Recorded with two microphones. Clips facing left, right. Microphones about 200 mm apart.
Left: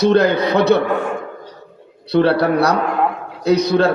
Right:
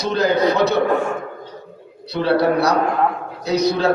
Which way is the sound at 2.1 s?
60° left (ahead or behind).